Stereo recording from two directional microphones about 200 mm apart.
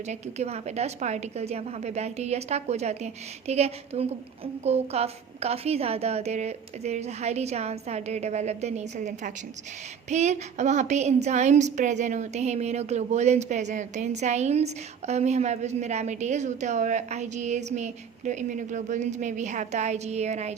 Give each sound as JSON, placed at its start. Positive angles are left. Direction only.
{"t": 0.1, "sound": "a woman's voice", "side_deg": -35}